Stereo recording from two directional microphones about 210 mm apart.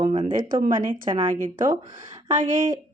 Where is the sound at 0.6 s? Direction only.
40° right (ahead or behind).